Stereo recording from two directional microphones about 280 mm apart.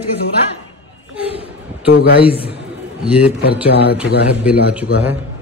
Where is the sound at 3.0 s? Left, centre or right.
Centre.